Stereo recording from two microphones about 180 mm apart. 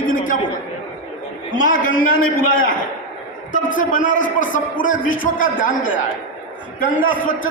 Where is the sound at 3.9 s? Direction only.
45° left (ahead or behind).